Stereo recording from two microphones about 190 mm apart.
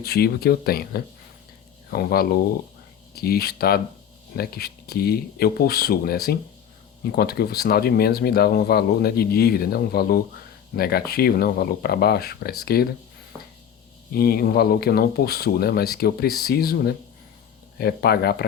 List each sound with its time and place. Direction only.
0.0 s speech: 55° left (ahead or behind)
13.3 s chopping: 10° left (ahead or behind)
14.1 s speech: 55° left (ahead or behind)